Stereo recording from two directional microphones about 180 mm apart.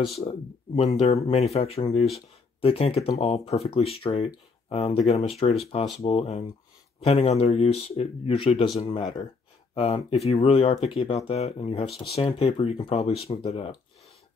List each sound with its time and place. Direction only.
0.1 s speech: 35° left (ahead or behind)